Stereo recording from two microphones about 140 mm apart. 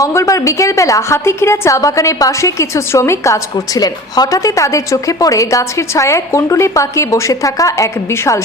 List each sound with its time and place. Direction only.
0.0 s a woman's voice: 20° left (ahead or behind)